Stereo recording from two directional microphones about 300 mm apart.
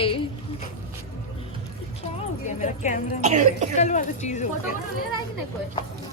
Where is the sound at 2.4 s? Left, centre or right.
Left.